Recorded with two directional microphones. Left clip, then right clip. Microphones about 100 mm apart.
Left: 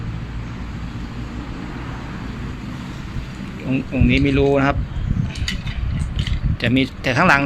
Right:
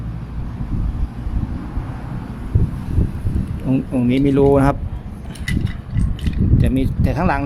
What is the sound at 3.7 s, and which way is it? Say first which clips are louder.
Speech: right 1 dB; 50° right (ahead or behind).